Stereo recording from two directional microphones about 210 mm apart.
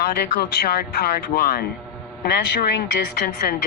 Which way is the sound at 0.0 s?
45° left (ahead or behind).